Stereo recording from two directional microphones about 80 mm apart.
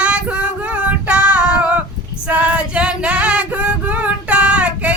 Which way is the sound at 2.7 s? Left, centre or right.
Centre.